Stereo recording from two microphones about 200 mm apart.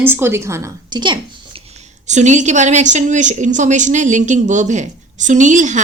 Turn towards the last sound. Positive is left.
turn(degrees=-40)  # may be behind; listen again after turning